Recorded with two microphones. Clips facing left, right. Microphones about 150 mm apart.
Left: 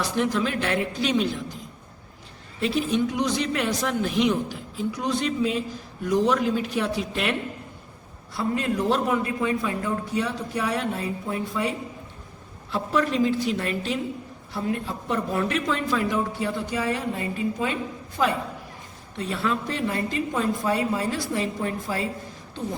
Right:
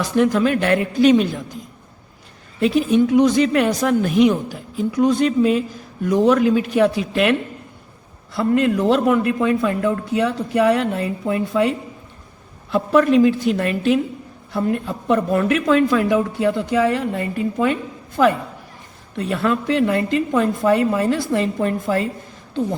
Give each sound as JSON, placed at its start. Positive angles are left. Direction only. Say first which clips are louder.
{"t": 0.2, "sound": "speech", "louder": "right 9 dB", "side_deg": -55}
{"t": 2.6, "sound": "a man's voice", "louder": "right 8 dB", "side_deg": -50}
{"t": 12.7, "sound": "speech", "louder": "right 9 dB", "side_deg": -60}
{"t": 19.2, "sound": "speech", "louder": "right 6 dB", "side_deg": -60}